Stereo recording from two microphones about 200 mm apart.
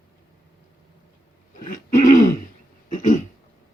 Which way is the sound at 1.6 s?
40° left (ahead or behind).